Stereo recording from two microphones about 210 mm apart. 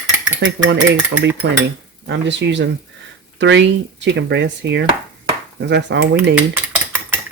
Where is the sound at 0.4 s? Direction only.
60° right (ahead or behind).